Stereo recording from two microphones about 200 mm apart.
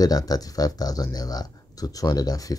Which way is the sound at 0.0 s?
20° left (ahead or behind).